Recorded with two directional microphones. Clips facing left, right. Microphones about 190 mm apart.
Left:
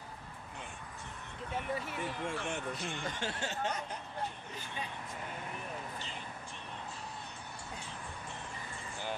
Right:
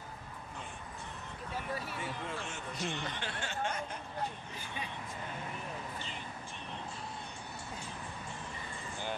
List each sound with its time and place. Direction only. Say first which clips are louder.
1.5 s speech: left 2 dB; 20° left (ahead or behind)
2.2 s speech: left 4 dB; 60° left (ahead or behind); by 3.5 s 40° left (ahead or behind)